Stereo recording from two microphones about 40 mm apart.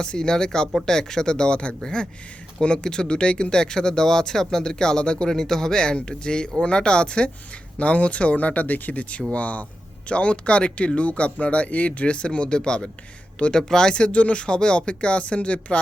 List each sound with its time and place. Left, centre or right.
0.0 s speech: centre
5.3 s speech: centre; by 15.8 s left